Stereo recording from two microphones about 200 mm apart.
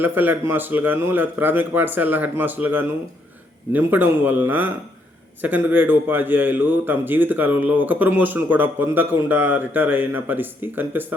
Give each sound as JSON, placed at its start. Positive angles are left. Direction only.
{"t": 0.0, "sound": "a man's voice", "side_deg": -10}